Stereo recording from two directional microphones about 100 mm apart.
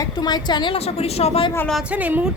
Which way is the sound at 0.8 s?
90° left.